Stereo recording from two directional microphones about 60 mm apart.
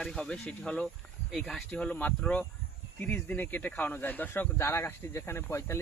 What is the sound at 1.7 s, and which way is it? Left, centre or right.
Speech, centre.